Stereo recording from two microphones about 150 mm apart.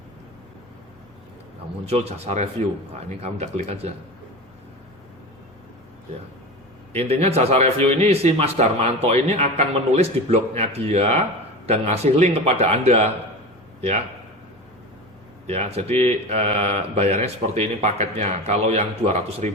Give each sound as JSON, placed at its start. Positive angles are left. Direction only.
{"t": 1.9, "sound": "a man's voice", "side_deg": -45}
{"t": 6.9, "sound": "a man's voice", "side_deg": -45}
{"t": 15.4, "sound": "a man's voice", "side_deg": -45}